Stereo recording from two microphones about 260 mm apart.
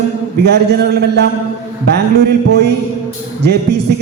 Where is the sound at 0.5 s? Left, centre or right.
Right.